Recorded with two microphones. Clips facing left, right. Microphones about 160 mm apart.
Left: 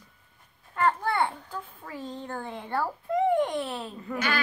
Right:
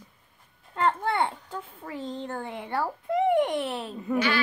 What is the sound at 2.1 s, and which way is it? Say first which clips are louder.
A woman's voice: right 2 dB; 15° right (ahead or behind).